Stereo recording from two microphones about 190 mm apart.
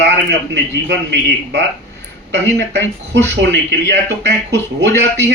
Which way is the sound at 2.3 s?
65° right (ahead or behind).